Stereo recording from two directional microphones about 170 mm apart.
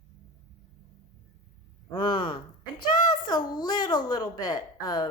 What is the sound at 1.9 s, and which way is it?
A woman's voice, 25° left (ahead or behind).